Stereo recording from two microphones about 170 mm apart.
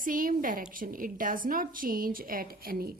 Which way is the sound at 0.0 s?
55° right (ahead or behind).